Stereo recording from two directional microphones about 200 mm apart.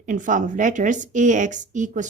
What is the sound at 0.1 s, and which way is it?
A woman's voice, 40° right (ahead or behind).